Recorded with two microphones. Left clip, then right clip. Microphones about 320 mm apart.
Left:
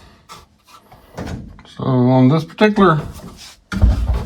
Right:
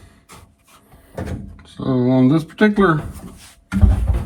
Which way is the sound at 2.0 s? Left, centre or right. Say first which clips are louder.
Left 1 dB; centre.